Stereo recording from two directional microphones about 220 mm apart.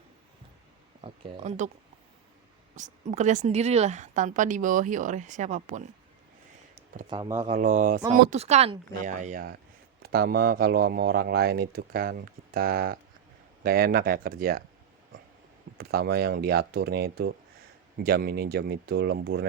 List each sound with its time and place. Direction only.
1.0 s speech: 25° right (ahead or behind)
2.7 s a woman's voice: 35° right (ahead or behind)
7.1 s speech: 15° right (ahead or behind)
7.5 s a woman's voice: 35° right (ahead or behind)
15.8 s speech: 45° right (ahead or behind)